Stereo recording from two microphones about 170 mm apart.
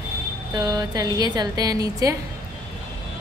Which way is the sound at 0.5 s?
25° right (ahead or behind).